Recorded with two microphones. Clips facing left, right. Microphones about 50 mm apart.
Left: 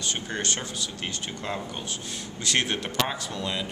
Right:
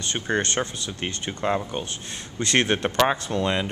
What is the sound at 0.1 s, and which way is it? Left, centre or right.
Speech, right.